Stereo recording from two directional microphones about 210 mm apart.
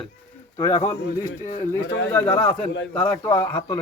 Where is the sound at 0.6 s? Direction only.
15° left (ahead or behind).